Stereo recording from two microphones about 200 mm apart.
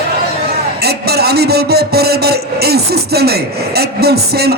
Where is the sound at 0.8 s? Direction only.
55° right (ahead or behind).